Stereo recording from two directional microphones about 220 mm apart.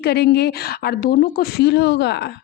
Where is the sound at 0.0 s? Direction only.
45° left (ahead or behind).